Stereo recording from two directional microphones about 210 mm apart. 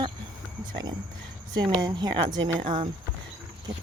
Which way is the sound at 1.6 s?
20° right (ahead or behind).